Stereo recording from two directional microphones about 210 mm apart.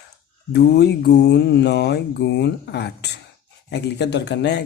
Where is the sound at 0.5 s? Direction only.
50° left (ahead or behind).